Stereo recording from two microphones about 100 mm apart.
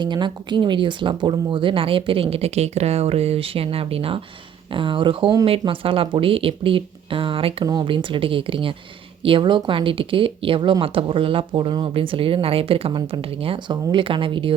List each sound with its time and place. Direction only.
0.0 s speech: 50° right (ahead or behind); by 4.2 s 70° right (ahead or behind)
4.7 s speech: 55° right (ahead or behind)
5.5 s speech: 65° right (ahead or behind)
7.6 s speech: 45° right (ahead or behind)
11.9 s a woman's voice: 65° right (ahead or behind)